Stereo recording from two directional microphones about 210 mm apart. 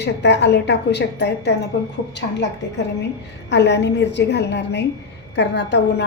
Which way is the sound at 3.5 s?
55° left (ahead or behind).